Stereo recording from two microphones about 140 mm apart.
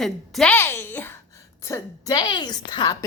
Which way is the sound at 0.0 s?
5° left (ahead or behind).